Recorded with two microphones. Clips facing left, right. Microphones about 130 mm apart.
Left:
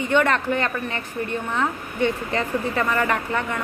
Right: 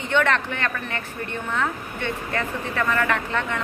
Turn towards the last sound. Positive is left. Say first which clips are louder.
# left 1 dB
turn(degrees=15)  # may be behind; listen again after turning